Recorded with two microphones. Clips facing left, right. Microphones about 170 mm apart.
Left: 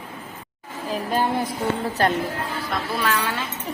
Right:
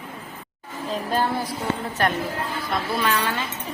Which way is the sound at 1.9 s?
35° left (ahead or behind).